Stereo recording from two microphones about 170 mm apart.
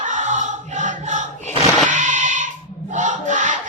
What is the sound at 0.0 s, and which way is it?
Choir, 45° right (ahead or behind).